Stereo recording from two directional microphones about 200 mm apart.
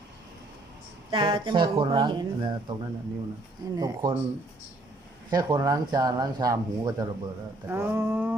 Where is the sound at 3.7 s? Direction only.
20° right (ahead or behind).